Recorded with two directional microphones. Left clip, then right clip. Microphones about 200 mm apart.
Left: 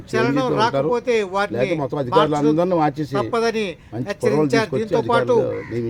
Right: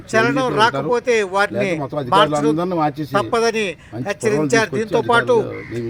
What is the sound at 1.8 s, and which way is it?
Speech, 10° left (ahead or behind).